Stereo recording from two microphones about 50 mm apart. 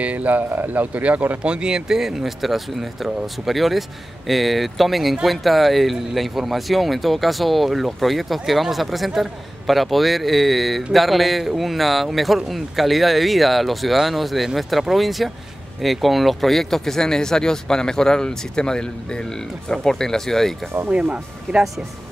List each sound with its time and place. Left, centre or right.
0.0 s speech: right
1.4 s speech: centre
20.9 s speech: right